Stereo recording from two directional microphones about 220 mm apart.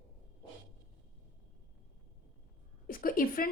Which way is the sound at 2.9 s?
40° left (ahead or behind).